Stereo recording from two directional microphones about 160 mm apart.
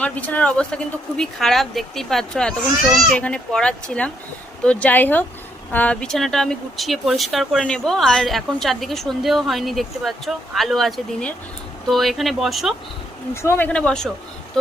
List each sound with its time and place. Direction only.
0.0 s speech: 10° left (ahead or behind)
13.3 s speech: 15° left (ahead or behind)
13.7 s speech: 5° left (ahead or behind)